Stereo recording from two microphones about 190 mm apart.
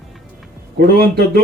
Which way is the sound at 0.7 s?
55° right (ahead or behind).